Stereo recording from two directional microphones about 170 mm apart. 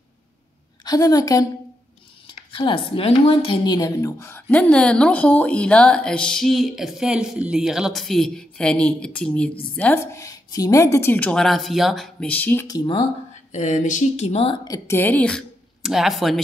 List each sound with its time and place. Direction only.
0.8 s a woman's voice: 20° left (ahead or behind)
12.6 s speech: 25° left (ahead or behind)
13.6 s a woman's voice: 45° left (ahead or behind); by 16.3 s centre (ahead or behind)